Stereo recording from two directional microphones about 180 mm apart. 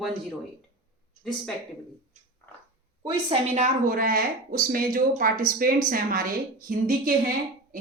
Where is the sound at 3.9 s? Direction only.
55° right (ahead or behind).